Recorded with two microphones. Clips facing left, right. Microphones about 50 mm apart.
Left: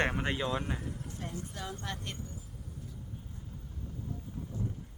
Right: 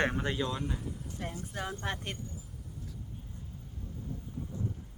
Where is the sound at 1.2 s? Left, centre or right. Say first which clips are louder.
Right 4 dB; right.